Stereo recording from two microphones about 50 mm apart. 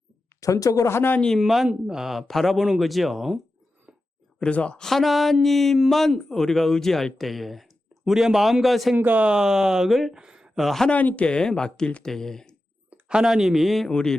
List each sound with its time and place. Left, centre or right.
0.3 s speech: left
1.4 s speech: centre
2.2 s speech: centre
4.5 s speech: left
4.8 s speech: centre
9.0 s speech: right
9.2 s speech: centre
9.9 s speech: centre
10.2 s a sound: centre
10.6 s speech: centre
10.9 s speech: left
11.3 s speech: centre
12.9 s speech: centre
13.9 s speech: centre